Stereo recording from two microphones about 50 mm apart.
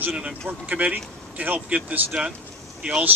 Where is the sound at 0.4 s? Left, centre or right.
Right.